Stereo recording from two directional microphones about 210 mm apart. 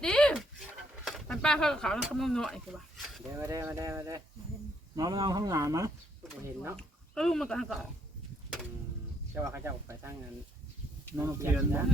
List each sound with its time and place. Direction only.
0.0 s a sound: 5° left (ahead or behind)
3.3 s speech: 15° right (ahead or behind)
6.7 s speech: 5° left (ahead or behind)
9.3 s speech: 10° right (ahead or behind)